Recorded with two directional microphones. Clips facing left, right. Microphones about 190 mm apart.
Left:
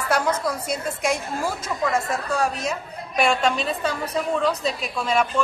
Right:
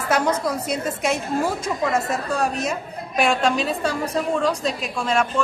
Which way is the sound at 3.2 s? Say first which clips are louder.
Right 1 dB; centre (ahead or behind).